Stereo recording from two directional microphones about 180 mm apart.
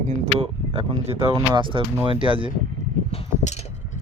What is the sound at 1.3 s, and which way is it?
Speech, 25° right (ahead or behind).